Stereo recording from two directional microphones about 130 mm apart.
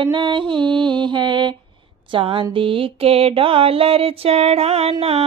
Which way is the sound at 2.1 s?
40° right (ahead or behind).